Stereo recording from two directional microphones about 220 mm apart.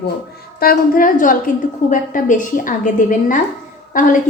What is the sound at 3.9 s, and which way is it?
Speech, 35° left (ahead or behind).